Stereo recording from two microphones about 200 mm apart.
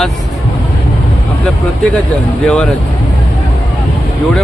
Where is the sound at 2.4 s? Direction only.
5° left (ahead or behind).